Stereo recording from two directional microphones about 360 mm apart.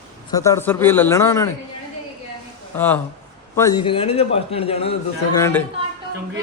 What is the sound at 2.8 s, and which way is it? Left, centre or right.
A man's voice, centre.